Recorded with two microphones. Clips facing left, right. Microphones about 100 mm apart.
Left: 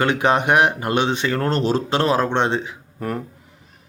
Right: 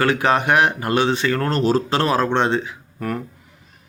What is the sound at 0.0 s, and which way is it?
Speech, 25° left (ahead or behind).